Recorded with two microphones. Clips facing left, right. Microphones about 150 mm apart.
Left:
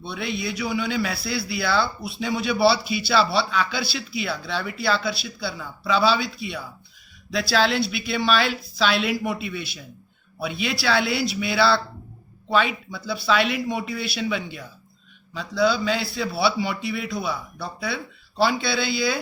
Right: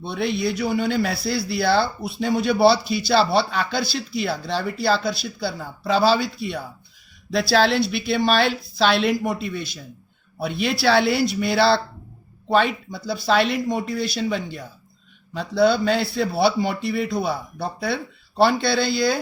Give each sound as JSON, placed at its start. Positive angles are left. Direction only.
{"t": 0.0, "sound": "a man's voice", "side_deg": -55}
{"t": 1.1, "sound": "a man's voice", "side_deg": 55}
{"t": 1.6, "sound": "a man's voice", "side_deg": -55}
{"t": 2.7, "sound": "a man's voice", "side_deg": 55}
{"t": 3.1, "sound": "a man's voice", "side_deg": -50}
{"t": 15.3, "sound": "a man's voice", "side_deg": -55}